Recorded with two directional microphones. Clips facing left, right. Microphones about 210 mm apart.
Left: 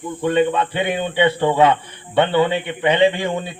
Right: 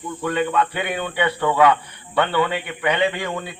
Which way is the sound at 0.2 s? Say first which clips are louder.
Left 4 dB; 25° left (ahead or behind).